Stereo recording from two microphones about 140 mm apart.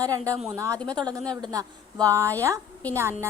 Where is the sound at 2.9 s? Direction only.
20° right (ahead or behind).